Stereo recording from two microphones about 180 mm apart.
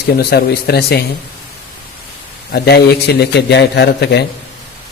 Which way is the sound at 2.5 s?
65° left (ahead or behind).